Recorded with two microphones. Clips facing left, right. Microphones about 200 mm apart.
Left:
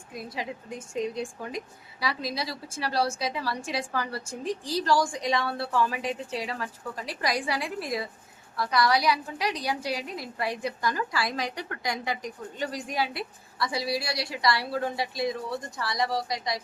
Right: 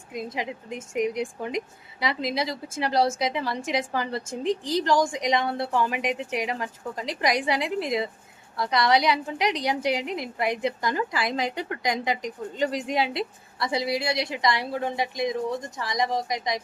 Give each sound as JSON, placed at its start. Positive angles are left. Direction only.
{"t": 0.1, "sound": "speech", "side_deg": -20}